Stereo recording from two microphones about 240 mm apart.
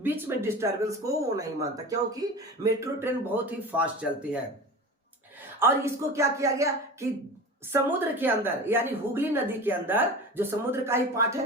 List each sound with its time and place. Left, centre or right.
0.0 s a woman's voice: centre
3.0 s a woman's voice: centre
5.5 s a woman's voice: centre